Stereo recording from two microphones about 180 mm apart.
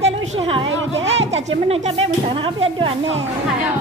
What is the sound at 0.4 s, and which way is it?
A woman's voice, 30° right (ahead or behind).